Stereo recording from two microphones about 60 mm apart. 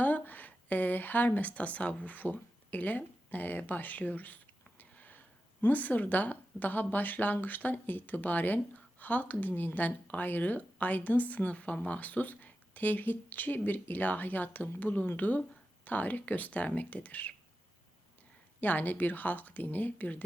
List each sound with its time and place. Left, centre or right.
0.0 s a woman's voice: left
4.8 s a sound: left
5.6 s speech: left
18.6 s speech: left